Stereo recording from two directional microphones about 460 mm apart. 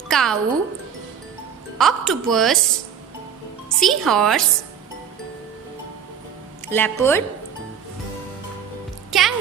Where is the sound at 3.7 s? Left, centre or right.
Centre.